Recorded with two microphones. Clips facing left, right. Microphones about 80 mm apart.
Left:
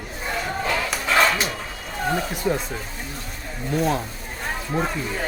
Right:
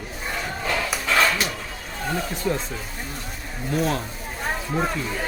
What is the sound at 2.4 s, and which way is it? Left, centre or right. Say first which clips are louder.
Speech: left 2 dB; left.